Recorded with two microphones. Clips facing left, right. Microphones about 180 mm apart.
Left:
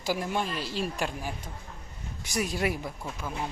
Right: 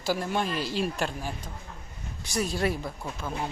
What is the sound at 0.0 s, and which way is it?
Speech, 15° left (ahead or behind).